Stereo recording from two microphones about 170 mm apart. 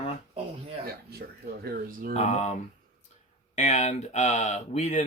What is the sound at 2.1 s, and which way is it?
Speech, 40° left (ahead or behind).